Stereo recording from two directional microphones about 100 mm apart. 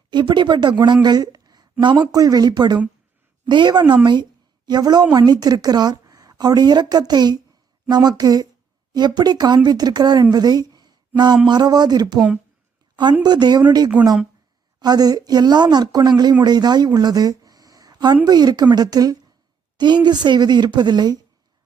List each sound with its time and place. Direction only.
0.1 s speech: 50° right (ahead or behind)
1.0 s a sound: 40° right (ahead or behind)
1.8 s a woman's voice: 50° right (ahead or behind)
10.3 s a sound: 40° right (ahead or behind)
11.4 s speech: 45° right (ahead or behind)
13.2 s speech: 45° right (ahead or behind)